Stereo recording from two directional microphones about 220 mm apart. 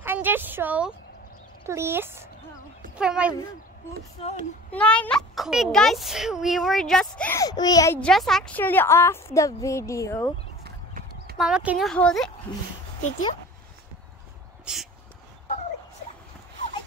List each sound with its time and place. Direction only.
0.0 s a woman's voice: 10° right (ahead or behind)
4.2 s speech: 25° left (ahead or behind)
4.6 s a child's voice: 5° left (ahead or behind)
10.6 s clip-clop: 45° right (ahead or behind)
11.3 s a child's voice: 5° right (ahead or behind)
14.7 s speech: 5° right (ahead or behind)